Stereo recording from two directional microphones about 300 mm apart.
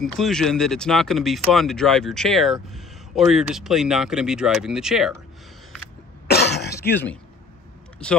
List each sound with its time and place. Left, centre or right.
0.0 s speech: centre
6.2 s cough: left
6.7 s speech: centre